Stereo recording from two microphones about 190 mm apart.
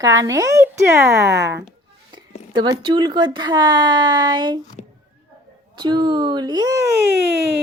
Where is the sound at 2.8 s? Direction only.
25° right (ahead or behind).